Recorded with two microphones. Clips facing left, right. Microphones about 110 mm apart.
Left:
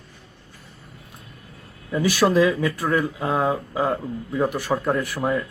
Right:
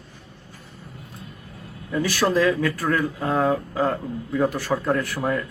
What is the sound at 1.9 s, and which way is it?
Speech, 10° left (ahead or behind).